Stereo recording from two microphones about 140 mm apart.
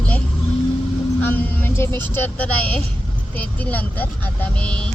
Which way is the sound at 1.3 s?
15° left (ahead or behind).